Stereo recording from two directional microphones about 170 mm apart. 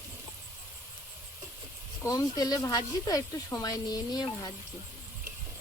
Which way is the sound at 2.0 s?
20° left (ahead or behind).